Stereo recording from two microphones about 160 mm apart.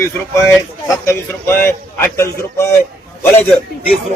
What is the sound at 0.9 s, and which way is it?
Speech, 15° left (ahead or behind).